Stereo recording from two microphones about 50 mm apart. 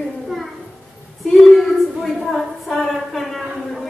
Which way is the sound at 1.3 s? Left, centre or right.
Centre.